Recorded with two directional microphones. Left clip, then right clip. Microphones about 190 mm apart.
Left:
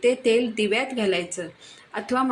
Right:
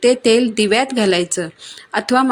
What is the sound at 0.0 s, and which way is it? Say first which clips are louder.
A woman's voice: right 7 dB; 55° right (ahead or behind).